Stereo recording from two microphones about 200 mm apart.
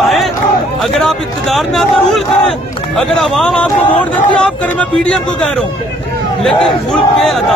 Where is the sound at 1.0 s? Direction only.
Centre (ahead or behind).